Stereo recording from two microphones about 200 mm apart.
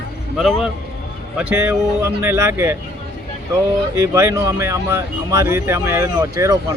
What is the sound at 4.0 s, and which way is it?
Speech, 15° right (ahead or behind).